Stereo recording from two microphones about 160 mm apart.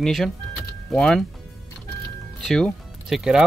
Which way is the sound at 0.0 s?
Centre (ahead or behind).